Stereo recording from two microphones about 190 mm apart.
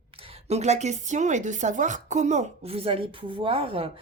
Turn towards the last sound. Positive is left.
turn(degrees=-30)  # may be behind; listen again after turning